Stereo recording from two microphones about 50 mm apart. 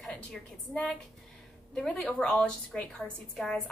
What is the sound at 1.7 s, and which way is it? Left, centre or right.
A woman's voice, centre.